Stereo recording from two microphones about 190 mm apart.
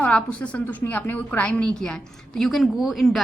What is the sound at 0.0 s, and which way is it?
A woman's voice, 5° left (ahead or behind).